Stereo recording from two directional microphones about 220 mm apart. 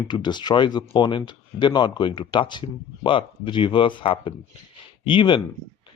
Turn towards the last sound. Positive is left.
turn(degrees=20)  # may be behind; listen again after turning